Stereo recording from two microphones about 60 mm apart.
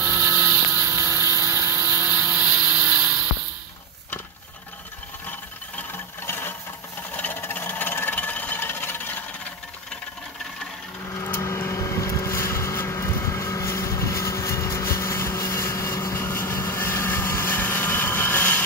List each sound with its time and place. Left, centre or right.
0.0 s motorboat: right
0.7 s vehicle: right
1.5 s vehicle: right
6.2 s a sound: left
7.2 s engine: left
11.3 s vehicle: left